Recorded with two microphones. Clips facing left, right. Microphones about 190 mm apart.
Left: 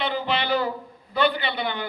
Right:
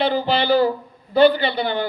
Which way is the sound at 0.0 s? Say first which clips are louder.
Right 6 dB; 35° right (ahead or behind).